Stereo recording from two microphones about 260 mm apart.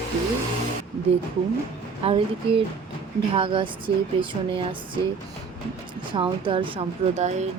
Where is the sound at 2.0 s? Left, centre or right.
Right.